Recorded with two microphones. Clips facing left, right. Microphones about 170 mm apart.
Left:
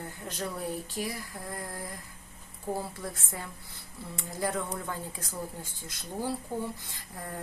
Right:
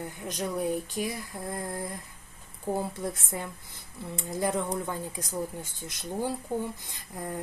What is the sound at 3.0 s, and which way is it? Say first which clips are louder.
Speech: right 5 dB; 20° right (ahead or behind).